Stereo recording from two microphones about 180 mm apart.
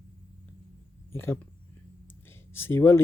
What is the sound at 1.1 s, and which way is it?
Speech, 15° left (ahead or behind).